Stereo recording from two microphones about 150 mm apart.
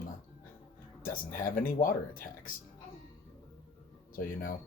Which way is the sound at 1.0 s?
70° left (ahead or behind).